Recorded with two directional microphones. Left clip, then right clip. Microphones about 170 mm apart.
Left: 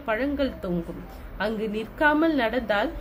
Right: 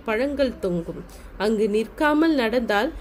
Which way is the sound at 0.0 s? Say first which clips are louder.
Right 3 dB; 55° right (ahead or behind).